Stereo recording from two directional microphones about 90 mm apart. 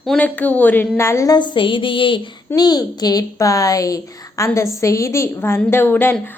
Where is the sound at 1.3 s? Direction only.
60° left (ahead or behind).